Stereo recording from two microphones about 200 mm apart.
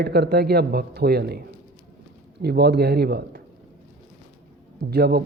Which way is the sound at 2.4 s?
55° right (ahead or behind).